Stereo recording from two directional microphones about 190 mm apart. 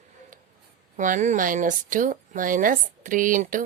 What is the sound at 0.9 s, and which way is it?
Speech, 45° right (ahead or behind).